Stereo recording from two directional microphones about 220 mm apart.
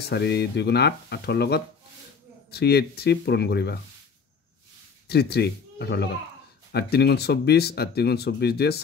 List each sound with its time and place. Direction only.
0.1 s speech: 50° left (ahead or behind)
5.0 s speech: 45° left (ahead or behind)